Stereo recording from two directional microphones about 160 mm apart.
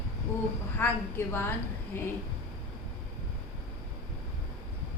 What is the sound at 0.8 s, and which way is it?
Speech, 15° left (ahead or behind).